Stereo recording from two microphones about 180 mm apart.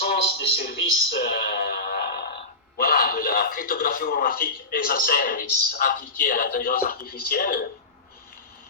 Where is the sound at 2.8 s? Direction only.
55° left (ahead or behind).